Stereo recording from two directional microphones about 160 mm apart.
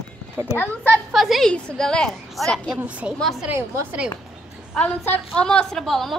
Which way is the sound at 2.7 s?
10° right (ahead or behind).